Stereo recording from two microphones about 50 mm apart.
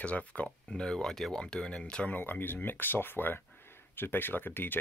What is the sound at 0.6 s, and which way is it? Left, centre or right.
Speech, centre.